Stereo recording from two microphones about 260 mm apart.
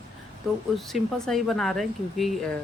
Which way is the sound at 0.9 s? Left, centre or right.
Centre.